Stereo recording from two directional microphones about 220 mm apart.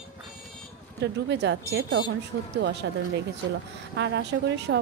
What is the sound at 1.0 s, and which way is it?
Speech, 50° right (ahead or behind).